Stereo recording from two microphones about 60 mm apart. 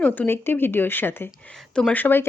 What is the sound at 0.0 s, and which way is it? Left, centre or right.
A woman's voice, left.